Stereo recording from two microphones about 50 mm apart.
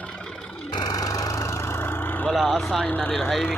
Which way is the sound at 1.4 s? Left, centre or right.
Left.